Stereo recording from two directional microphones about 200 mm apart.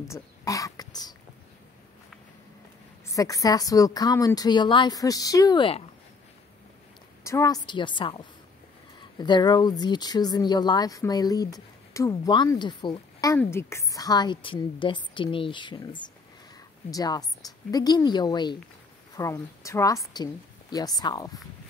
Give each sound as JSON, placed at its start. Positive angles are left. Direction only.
{"t": 0.1, "sound": "speech", "side_deg": 15}
{"t": 3.2, "sound": "a woman's voice", "side_deg": 15}
{"t": 7.2, "sound": "speech", "side_deg": 15}
{"t": 9.2, "sound": "a woman's voice", "side_deg": 20}